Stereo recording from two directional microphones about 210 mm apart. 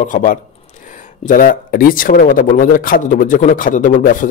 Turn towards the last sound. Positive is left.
turn(degrees=40)  # may be behind; listen again after turning